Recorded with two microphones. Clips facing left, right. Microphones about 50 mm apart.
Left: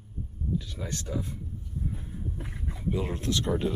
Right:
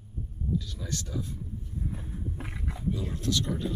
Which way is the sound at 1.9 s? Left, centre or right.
Right.